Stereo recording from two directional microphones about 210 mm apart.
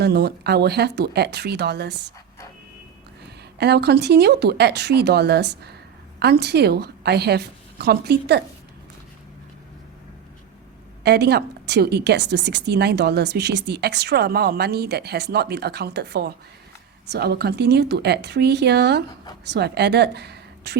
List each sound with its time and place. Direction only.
0.0 s a woman's voice: 50° right (ahead or behind)
3.6 s a woman's voice: 50° right (ahead or behind)
11.0 s a woman's voice: 50° right (ahead or behind)